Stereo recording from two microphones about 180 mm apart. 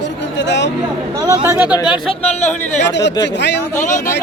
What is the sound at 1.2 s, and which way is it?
Speech, 20° right (ahead or behind).